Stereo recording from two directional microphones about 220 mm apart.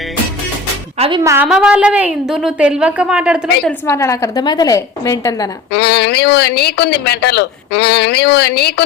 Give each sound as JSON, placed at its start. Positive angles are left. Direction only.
{"t": 0.9, "sound": "a woman's voice", "side_deg": -25}
{"t": 1.2, "sound": "a woman's voice", "side_deg": -10}
{"t": 3.7, "sound": "a woman's voice", "side_deg": 10}
{"t": 5.7, "sound": "speech", "side_deg": 50}